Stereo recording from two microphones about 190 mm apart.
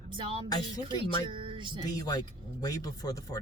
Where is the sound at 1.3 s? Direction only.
25° right (ahead or behind).